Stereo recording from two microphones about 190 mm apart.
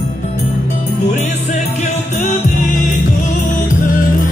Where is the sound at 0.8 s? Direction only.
40° left (ahead or behind).